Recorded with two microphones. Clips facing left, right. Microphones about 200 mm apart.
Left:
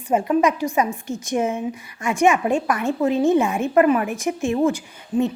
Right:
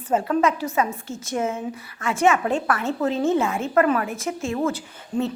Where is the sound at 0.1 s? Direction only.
15° left (ahead or behind).